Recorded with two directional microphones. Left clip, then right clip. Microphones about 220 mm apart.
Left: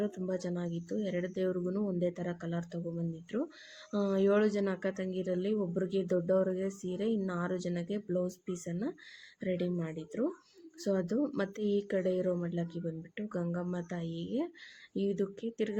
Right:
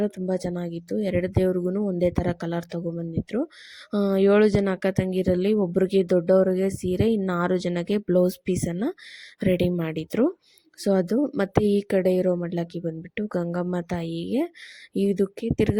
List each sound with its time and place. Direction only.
0.0 s speech: 35° right (ahead or behind)